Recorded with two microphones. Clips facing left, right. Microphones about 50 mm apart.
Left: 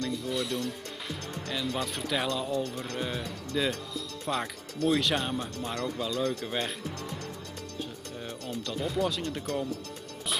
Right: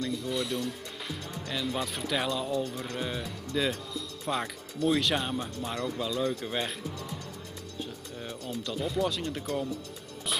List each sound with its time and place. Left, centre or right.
0.1 s speech: centre
8.2 s speech: centre